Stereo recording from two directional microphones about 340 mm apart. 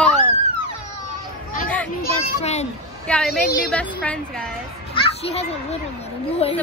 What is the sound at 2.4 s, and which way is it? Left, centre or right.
Speech, centre.